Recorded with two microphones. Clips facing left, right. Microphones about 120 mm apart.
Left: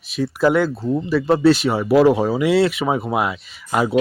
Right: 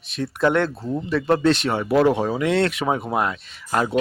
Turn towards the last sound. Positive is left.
turn(degrees=5)  # may be behind; listen again after turning